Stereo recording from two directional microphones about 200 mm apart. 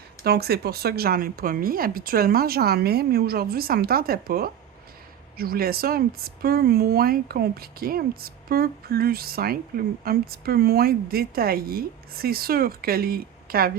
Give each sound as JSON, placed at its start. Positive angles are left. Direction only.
{"t": 0.3, "sound": "speech", "side_deg": -50}